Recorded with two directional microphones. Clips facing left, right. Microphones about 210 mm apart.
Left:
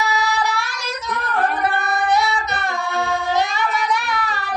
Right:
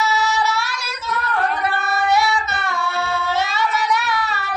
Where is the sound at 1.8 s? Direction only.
15° left (ahead or behind).